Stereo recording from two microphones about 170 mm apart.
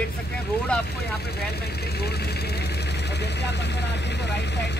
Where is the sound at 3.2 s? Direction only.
85° left.